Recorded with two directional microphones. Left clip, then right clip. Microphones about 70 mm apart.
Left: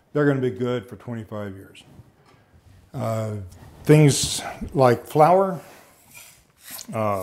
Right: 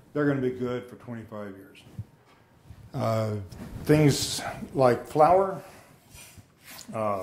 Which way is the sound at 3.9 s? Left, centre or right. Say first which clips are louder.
Left 5 dB; left.